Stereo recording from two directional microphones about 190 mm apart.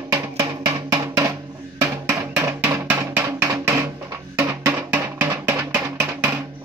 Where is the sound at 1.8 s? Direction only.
15° right (ahead or behind).